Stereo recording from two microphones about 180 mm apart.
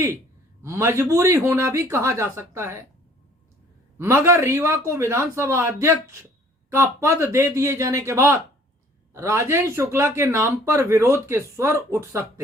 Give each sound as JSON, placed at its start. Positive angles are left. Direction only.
{"t": 0.6, "sound": "speech", "side_deg": -15}
{"t": 3.9, "sound": "speech", "side_deg": -15}